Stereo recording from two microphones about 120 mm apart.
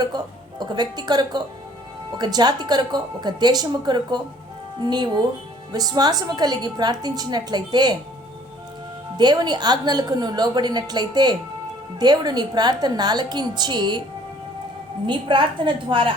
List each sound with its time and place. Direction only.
0.6 s a woman's voice: 35° right (ahead or behind)
9.1 s a woman's voice: 35° right (ahead or behind)
15.0 s a woman's voice: 40° right (ahead or behind)